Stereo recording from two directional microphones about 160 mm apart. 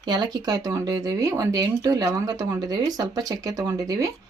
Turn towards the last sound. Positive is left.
turn(degrees=-20)  # may be behind; listen again after turning